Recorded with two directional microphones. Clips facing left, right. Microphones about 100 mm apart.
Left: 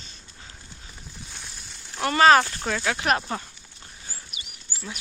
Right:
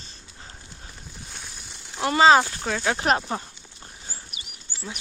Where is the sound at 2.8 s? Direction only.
30° right (ahead or behind).